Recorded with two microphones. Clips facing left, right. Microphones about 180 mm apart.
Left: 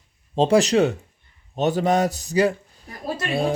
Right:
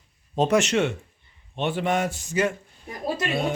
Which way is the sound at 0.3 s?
30° left (ahead or behind).